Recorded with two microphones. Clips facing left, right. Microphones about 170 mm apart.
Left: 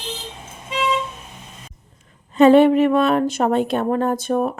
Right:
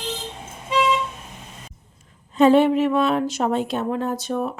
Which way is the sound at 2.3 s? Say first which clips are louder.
Left 4 dB; 60° left (ahead or behind).